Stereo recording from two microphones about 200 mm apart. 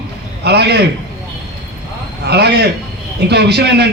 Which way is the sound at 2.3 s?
55° right (ahead or behind).